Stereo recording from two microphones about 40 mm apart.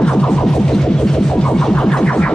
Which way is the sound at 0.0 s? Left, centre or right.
Left.